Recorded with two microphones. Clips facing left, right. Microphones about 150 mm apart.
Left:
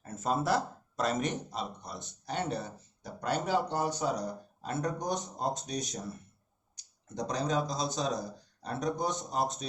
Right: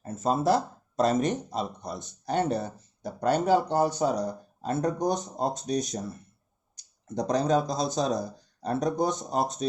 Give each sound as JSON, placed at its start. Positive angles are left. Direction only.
{"t": 0.0, "sound": "speech", "side_deg": -30}
{"t": 7.2, "sound": "speech", "side_deg": -35}